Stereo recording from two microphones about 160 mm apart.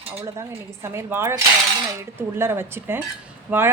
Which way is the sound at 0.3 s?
15° right (ahead or behind).